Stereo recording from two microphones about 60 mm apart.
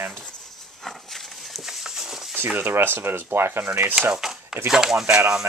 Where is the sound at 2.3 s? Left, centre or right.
Right.